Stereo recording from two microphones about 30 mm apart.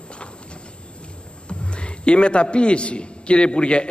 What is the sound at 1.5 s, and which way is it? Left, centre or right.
A man's voice, left.